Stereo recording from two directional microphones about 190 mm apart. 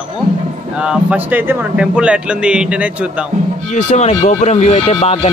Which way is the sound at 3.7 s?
40° left (ahead or behind).